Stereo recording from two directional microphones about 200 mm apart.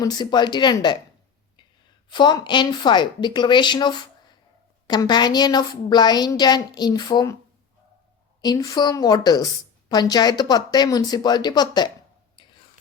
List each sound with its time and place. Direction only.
0.0 s a woman's voice: 20° left (ahead or behind)
2.0 s a woman's voice: 20° left (ahead or behind)
8.4 s a woman's voice: 20° left (ahead or behind)
12.4 s whispering: 20° left (ahead or behind)